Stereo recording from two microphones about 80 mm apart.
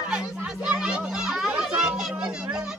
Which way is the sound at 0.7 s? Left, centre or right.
Centre.